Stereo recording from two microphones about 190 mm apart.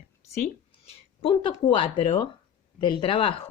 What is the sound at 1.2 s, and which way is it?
A woman's voice, 25° left (ahead or behind).